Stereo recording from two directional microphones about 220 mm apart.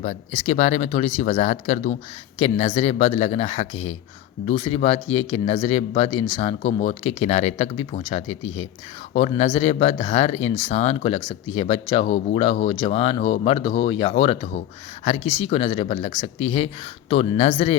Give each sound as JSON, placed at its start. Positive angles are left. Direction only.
{"t": 0.0, "sound": "speech", "side_deg": 35}